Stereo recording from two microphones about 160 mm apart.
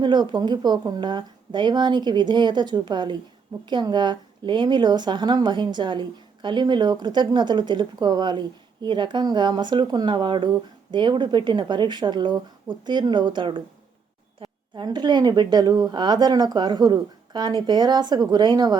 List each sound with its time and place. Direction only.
0.0 s speech: 30° right (ahead or behind)